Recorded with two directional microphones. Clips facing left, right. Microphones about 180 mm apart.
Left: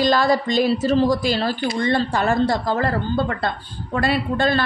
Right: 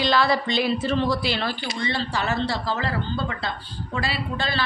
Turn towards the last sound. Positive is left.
turn(degrees=50)  # may be behind; listen again after turning